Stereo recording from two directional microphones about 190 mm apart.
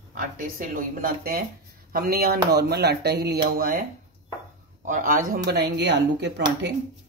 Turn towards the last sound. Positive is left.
turn(degrees=-65)  # may be behind; listen again after turning